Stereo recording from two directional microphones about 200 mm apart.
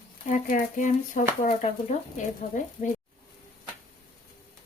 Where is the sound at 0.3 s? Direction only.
40° left (ahead or behind).